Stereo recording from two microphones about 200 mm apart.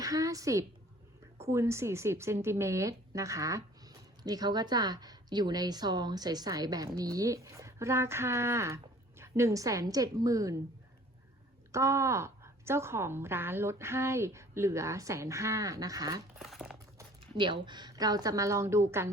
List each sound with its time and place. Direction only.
0.0 s a woman's voice: 15° right (ahead or behind)
11.7 s speech: 15° right (ahead or behind)
16.4 s speech: centre (ahead or behind)
17.0 s speech: 20° right (ahead or behind)